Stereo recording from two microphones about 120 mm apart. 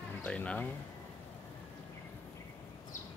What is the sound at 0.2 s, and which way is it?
Speech, 10° left (ahead or behind).